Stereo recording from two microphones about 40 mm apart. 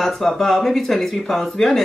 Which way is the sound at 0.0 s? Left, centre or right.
Centre.